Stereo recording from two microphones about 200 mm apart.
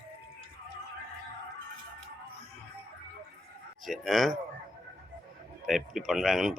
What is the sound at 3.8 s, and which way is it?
Speech, centre (ahead or behind).